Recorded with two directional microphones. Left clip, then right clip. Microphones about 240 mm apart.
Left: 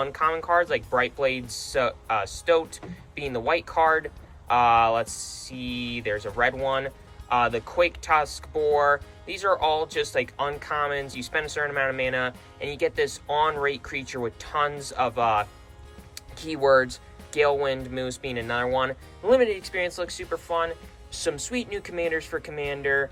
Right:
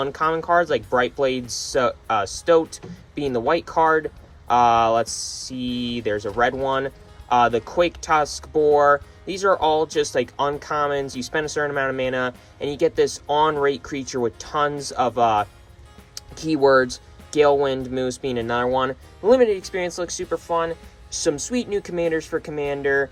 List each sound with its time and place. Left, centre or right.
0.0 s speech: centre